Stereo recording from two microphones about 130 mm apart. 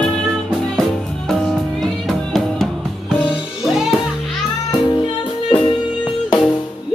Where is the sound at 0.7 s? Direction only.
5° left (ahead or behind).